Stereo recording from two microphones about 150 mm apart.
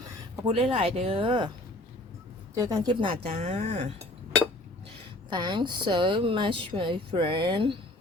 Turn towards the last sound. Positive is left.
turn(degrees=-35)  # may be behind; listen again after turning